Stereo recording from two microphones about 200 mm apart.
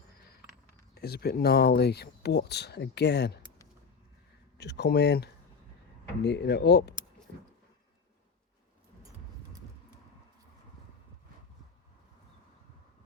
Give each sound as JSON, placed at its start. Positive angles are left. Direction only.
{"t": 0.9, "sound": "speech", "side_deg": 50}
{"t": 4.5, "sound": "speech", "side_deg": 55}